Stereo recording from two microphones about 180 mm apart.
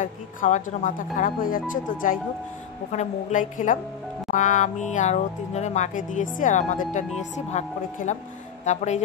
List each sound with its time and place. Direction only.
0.0 s speech: 45° left (ahead or behind)